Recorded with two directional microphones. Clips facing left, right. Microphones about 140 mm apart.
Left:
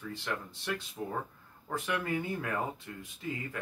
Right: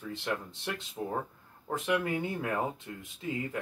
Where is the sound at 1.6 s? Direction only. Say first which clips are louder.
Right 4 dB; 20° right (ahead or behind).